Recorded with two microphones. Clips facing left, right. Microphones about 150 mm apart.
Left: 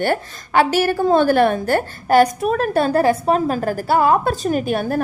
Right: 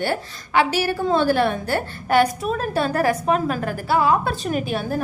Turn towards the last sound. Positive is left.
turn(degrees=50)  # may be behind; listen again after turning